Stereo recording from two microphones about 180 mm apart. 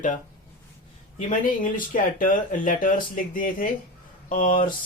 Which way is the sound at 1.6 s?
50° left (ahead or behind).